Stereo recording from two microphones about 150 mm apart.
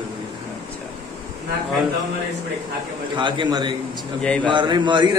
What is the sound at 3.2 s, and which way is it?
Speech, 30° right (ahead or behind).